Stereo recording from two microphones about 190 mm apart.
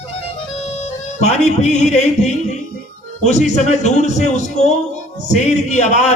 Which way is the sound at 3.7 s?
35° left (ahead or behind).